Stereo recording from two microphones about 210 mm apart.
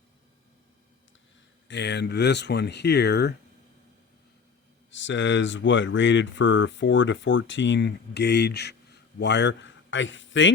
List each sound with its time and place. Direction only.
1.6 s speech: 55° left (ahead or behind)
4.9 s speech: 60° left (ahead or behind)